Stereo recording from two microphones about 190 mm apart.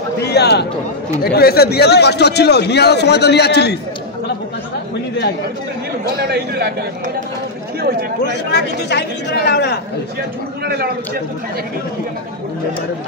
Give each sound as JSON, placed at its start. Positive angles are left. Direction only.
{"t": 0.2, "sound": "a sound", "side_deg": 60}
{"t": 1.2, "sound": "speech", "side_deg": 55}
{"t": 6.0, "sound": "speech", "side_deg": -55}
{"t": 8.5, "sound": "speech", "side_deg": 65}
{"t": 10.6, "sound": "a man's voice", "side_deg": -55}